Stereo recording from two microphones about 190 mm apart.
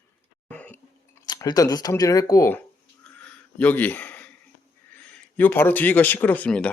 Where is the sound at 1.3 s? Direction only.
20° left (ahead or behind).